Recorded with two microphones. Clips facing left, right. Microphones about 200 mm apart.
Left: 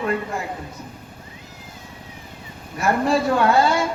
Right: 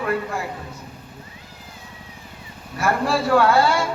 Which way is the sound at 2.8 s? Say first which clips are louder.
Left 2 dB; 20° left (ahead or behind).